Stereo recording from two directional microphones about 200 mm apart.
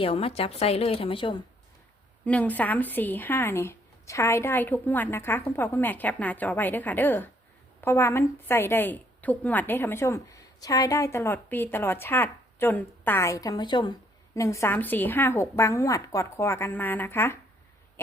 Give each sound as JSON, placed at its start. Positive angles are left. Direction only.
{"t": 0.0, "sound": "a woman's voice", "side_deg": 30}
{"t": 2.2, "sound": "a woman's voice", "side_deg": 5}